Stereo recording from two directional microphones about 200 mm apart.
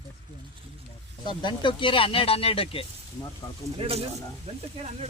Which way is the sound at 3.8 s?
30° right (ahead or behind).